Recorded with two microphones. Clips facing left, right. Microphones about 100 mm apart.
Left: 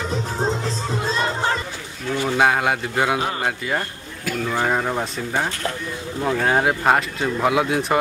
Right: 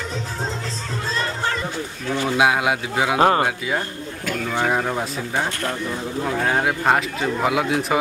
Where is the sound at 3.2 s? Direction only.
65° right (ahead or behind).